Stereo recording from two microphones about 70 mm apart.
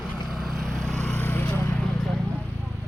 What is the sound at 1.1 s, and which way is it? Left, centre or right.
Vehicle, left.